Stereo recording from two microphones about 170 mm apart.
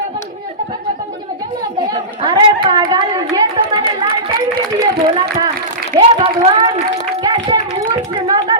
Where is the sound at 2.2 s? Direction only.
25° right (ahead or behind).